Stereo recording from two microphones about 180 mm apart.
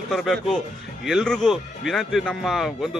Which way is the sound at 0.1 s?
Centre (ahead or behind).